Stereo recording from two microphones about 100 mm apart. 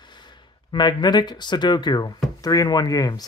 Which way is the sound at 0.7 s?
45° left (ahead or behind).